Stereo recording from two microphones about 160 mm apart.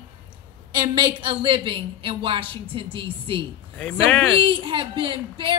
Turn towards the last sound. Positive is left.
turn(degrees=-30)  # may be behind; listen again after turning